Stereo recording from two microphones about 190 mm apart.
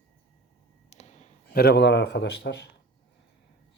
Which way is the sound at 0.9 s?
35° left (ahead or behind).